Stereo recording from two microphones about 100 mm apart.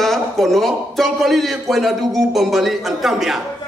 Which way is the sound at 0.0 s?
Centre (ahead or behind).